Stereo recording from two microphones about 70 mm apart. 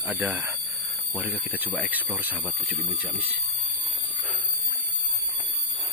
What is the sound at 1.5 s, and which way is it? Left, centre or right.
Speech, right.